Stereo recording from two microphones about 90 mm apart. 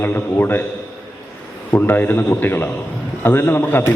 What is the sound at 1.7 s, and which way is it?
A man's voice, 25° left (ahead or behind).